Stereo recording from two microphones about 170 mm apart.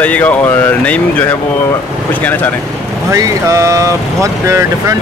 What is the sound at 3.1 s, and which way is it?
Speech, 20° right (ahead or behind).